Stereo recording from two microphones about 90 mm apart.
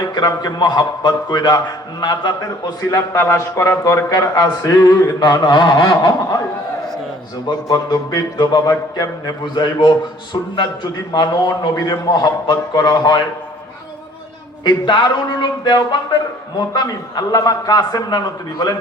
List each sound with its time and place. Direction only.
0.1 s a man's voice: 50° left (ahead or behind)
3.1 s speech: 35° left (ahead or behind)
4.1 s a man's voice: 50° left (ahead or behind)
7.4 s a man's voice: 50° left (ahead or behind)
11.9 s a man's voice: 50° left (ahead or behind)
14.6 s a man's voice: 60° left (ahead or behind)